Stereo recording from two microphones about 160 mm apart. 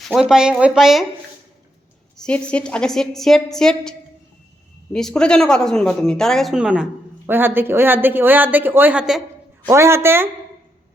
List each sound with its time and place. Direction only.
0.0 s speech: 5° right (ahead or behind)
2.1 s speech: 5° left (ahead or behind)
9.6 s speech: 15° right (ahead or behind)